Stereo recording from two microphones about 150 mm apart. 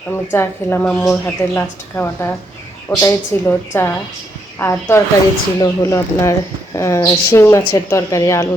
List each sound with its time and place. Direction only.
0.1 s a woman's voice: 15° left (ahead or behind)